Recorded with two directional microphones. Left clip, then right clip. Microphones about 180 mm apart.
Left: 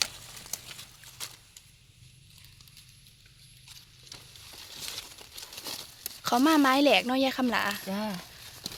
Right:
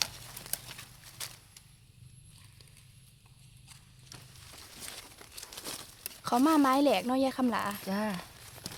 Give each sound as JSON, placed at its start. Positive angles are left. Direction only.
{"t": 5.5, "sound": "crumpling", "side_deg": 25}
{"t": 6.0, "sound": "speech", "side_deg": 0}